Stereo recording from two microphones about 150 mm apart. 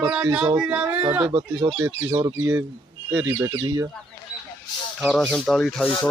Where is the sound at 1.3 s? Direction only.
30° right (ahead or behind).